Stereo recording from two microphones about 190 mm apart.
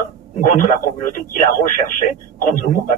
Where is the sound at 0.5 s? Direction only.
45° left (ahead or behind).